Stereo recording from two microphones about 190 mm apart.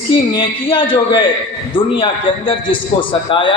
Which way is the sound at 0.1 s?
25° left (ahead or behind).